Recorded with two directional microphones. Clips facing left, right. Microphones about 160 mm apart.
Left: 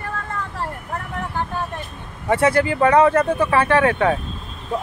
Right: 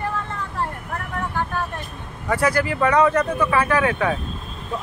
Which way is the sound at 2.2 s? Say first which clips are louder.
Left 3 dB; 25° left (ahead or behind).